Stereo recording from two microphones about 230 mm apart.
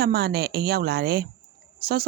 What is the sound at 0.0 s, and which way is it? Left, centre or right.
A woman's voice, right.